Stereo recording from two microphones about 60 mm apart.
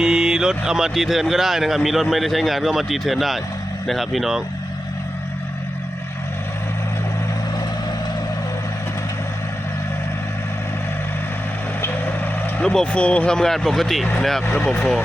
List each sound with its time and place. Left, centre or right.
0.0 s speech: centre
12.6 s speech: centre
14.7 s speech: centre